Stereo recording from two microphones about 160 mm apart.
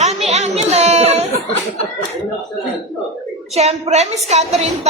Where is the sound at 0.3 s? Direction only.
40° right (ahead or behind).